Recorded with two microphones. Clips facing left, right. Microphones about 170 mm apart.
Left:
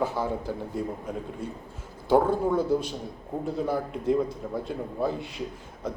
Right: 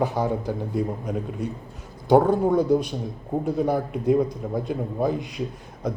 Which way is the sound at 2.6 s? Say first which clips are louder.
Right 5 dB; 15° right (ahead or behind).